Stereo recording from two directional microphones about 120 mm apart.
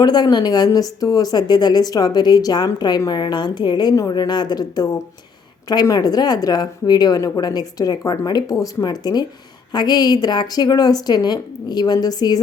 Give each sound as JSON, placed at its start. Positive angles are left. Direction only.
{"t": 0.0, "sound": "a woman's voice", "side_deg": 35}